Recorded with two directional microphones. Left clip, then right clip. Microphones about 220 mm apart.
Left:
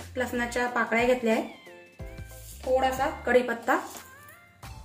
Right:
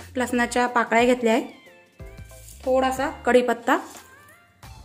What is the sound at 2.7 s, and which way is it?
A woman's voice, 55° right (ahead or behind).